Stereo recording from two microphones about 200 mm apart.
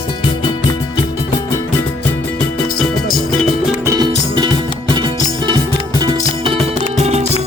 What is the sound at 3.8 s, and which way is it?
Music, 20° right (ahead or behind).